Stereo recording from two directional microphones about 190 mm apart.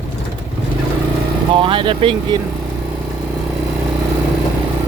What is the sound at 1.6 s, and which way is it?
Speech, 25° right (ahead or behind).